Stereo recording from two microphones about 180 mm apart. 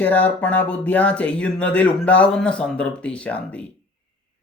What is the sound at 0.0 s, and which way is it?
Speech, 10° left (ahead or behind).